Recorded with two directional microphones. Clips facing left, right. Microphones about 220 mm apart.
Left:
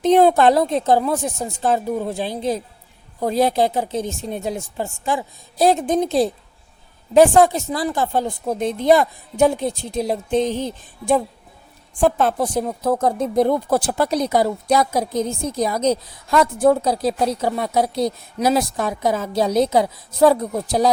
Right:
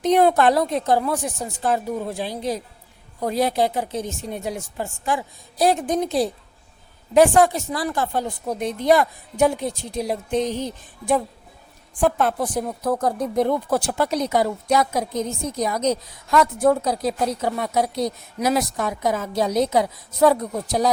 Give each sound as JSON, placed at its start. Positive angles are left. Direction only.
{"t": 0.0, "sound": "a woman's voice", "side_deg": 25}